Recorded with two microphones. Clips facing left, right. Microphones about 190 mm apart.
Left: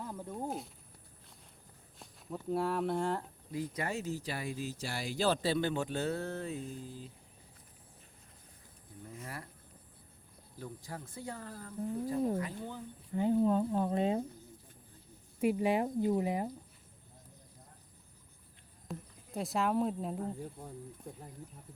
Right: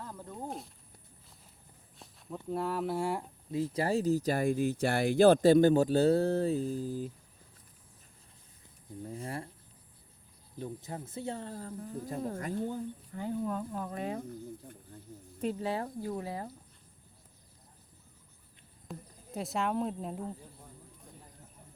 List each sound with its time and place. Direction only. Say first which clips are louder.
0.0 s snake: left 2 dB; 10° left (ahead or behind)
2.0 s speech: even; centre (ahead or behind)
3.5 s speech: right 7 dB; 30° right (ahead or behind)
9.0 s speech: right 6 dB; 30° right (ahead or behind)
10.6 s speech: right 5 dB; 20° right (ahead or behind)
12.4 s speech: right 5 dB; 45° right (ahead or behind)
13.1 s speech: left 7 dB; 20° left (ahead or behind)
15.4 s speech: left 4 dB; 10° left (ahead or behind)
18.9 s speech: left 1 dB; centre (ahead or behind)